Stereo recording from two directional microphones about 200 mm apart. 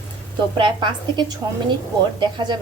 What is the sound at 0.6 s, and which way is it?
A woman's voice, 25° right (ahead or behind).